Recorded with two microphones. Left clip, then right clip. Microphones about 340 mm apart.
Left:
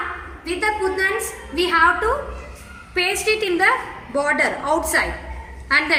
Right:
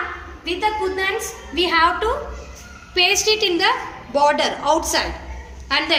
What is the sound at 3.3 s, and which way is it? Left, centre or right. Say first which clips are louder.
A woman's voice: even; centre.